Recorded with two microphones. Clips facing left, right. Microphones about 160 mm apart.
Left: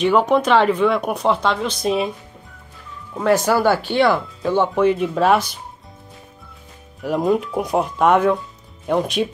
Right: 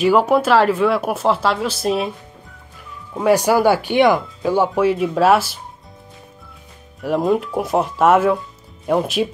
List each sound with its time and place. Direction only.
0.0 s speech: 5° right (ahead or behind)
3.2 s speech: 10° right (ahead or behind)
7.0 s speech: centre (ahead or behind)